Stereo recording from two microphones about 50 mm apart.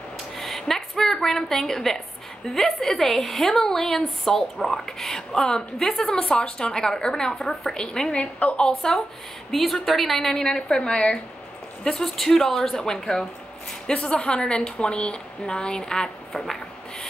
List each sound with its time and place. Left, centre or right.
0.4 s a sound: centre
2.4 s a woman's voice: centre
8.2 s a woman's voice: left
8.6 s a woman's voice: centre